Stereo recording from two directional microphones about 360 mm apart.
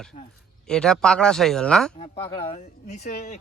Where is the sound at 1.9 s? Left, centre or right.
Centre.